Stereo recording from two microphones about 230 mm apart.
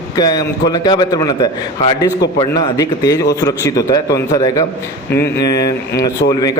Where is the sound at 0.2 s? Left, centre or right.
Centre.